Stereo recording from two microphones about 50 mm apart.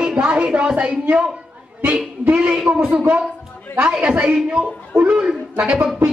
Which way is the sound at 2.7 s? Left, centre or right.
Right.